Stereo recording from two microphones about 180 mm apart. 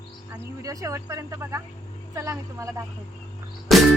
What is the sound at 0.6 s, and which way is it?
Speech, 20° right (ahead or behind).